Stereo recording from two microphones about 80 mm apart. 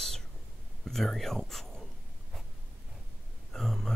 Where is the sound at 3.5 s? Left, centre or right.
Centre.